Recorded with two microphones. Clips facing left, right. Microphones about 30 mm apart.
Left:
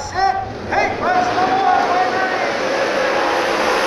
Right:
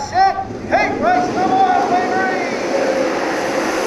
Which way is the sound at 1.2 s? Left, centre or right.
Left.